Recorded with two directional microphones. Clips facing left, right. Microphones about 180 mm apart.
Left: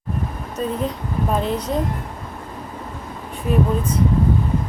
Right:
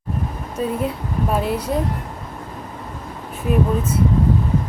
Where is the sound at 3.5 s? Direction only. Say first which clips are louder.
Even; 5° right (ahead or behind).